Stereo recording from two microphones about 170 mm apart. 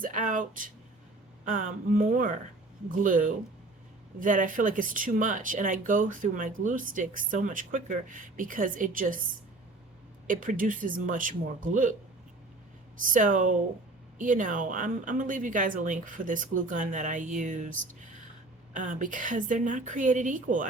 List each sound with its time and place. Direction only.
0.0 s speech: 50° right (ahead or behind)
10.2 s speech: 50° right (ahead or behind)
13.1 s speech: 50° right (ahead or behind)